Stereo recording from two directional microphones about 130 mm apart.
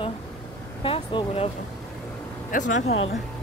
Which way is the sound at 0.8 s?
40° left (ahead or behind).